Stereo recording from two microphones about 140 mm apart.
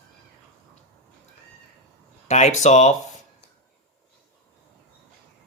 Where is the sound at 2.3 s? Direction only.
55° left (ahead or behind).